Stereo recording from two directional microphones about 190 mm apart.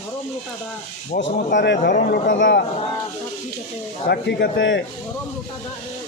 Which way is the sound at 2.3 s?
70° left (ahead or behind).